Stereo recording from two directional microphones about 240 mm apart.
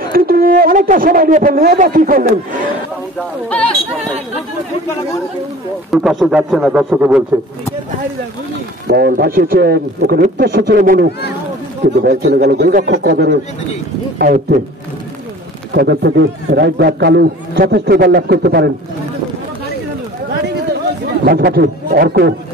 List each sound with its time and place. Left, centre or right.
0.1 s speech: right
3.4 s a man's voice: centre
5.9 s a man's voice: centre
8.8 s speech: right
15.7 s a man's voice: right
21.2 s speech: right